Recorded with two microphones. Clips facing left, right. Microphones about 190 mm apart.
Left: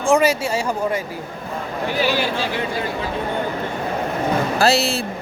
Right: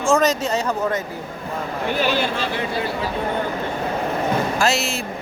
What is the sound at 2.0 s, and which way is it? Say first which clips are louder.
Speech: left 1 dB; 10° left (ahead or behind).